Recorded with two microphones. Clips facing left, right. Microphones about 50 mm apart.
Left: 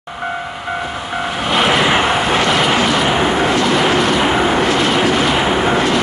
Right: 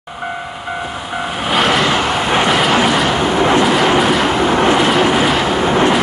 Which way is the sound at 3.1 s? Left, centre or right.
Centre.